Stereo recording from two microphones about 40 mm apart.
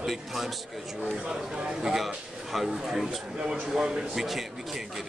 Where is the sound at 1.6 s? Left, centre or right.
Right.